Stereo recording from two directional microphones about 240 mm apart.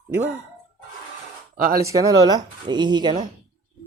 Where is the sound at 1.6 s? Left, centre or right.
Right.